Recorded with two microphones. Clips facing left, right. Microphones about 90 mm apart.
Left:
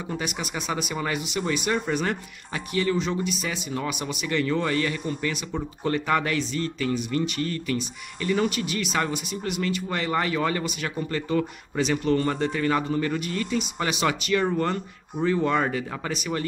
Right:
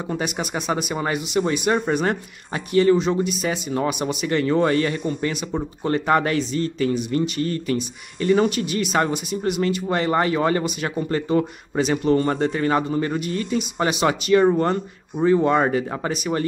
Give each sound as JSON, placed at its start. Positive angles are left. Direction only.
{"t": 0.2, "sound": "speech", "side_deg": -20}
{"t": 2.0, "sound": "speech", "side_deg": -35}
{"t": 5.0, "sound": "speech", "side_deg": -20}